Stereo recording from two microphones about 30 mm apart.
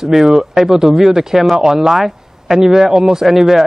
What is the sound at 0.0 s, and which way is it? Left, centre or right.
A man's voice, centre.